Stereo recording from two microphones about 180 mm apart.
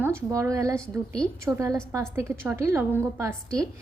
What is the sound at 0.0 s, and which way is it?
A woman's voice, 15° right (ahead or behind).